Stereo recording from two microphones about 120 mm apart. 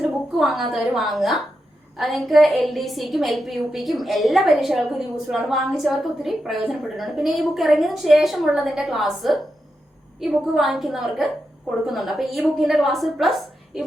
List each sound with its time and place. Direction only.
0.3 s a woman's voice: centre (ahead or behind)